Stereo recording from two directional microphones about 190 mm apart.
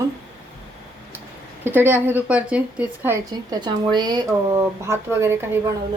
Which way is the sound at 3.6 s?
20° right (ahead or behind).